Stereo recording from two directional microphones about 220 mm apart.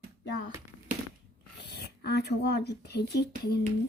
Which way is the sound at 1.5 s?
50° left (ahead or behind).